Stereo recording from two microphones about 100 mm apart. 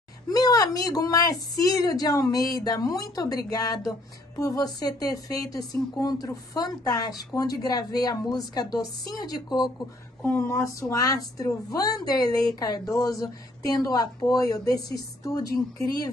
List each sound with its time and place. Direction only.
0.3 s a woman's voice: 40° left (ahead or behind)
10.2 s a woman's voice: 25° left (ahead or behind)